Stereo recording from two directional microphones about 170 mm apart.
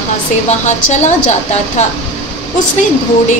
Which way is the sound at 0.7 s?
45° left (ahead or behind).